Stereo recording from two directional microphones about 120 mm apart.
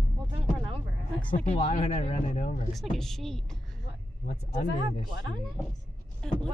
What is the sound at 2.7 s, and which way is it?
A woman's voice, centre (ahead or behind).